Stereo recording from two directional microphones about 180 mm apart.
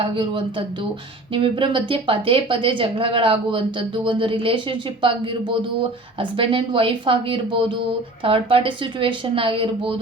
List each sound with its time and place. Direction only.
0.0 s a woman's voice: 25° right (ahead or behind)